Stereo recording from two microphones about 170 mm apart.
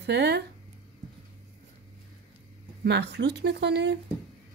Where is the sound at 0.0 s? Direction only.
80° right.